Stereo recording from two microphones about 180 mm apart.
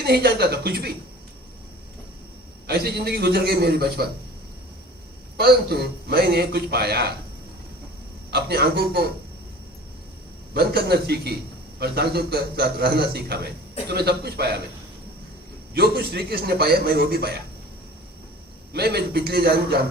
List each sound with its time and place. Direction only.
0.0 s a man's voice: 60° right (ahead or behind)
2.6 s a man's voice: 60° right (ahead or behind)
5.4 s a man's voice: 60° right (ahead or behind)
8.3 s a man's voice: 65° right (ahead or behind)
10.5 s a man's voice: 60° right (ahead or behind)
15.7 s a man's voice: 60° right (ahead or behind)
18.7 s a man's voice: 65° right (ahead or behind)